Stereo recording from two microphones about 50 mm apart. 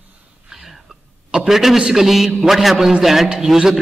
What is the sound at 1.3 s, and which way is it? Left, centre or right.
A man's voice, centre.